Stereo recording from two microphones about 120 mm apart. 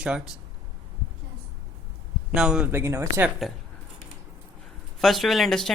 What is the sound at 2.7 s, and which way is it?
Speech, 20° right (ahead or behind).